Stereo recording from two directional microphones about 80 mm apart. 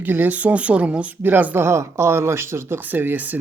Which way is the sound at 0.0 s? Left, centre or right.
Right.